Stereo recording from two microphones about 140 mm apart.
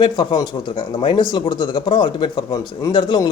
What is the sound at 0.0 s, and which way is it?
Speech, 35° left (ahead or behind).